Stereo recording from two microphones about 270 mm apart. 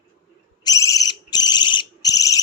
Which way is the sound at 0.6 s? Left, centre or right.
Centre.